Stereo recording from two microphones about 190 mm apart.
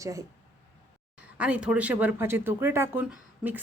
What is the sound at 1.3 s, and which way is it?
A woman's voice, 5° right (ahead or behind).